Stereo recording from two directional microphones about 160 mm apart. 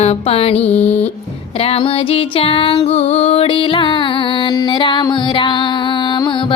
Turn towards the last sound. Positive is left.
turn(degrees=25)  # may be behind; listen again after turning